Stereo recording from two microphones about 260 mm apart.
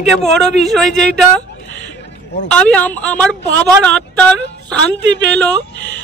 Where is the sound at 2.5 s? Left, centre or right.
Centre.